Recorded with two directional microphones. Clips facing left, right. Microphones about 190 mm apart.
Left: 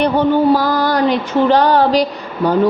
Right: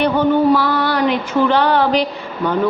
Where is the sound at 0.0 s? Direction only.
35° left (ahead or behind).